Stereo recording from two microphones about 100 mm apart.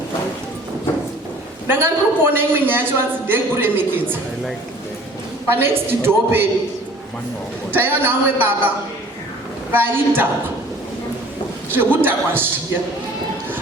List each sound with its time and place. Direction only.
1.6 s a man's voice: 20° right (ahead or behind)
5.5 s a man's voice: 25° right (ahead or behind)
7.7 s a man's voice: 20° right (ahead or behind)
9.7 s a man's voice: 20° right (ahead or behind)
11.7 s a man's voice: 20° right (ahead or behind)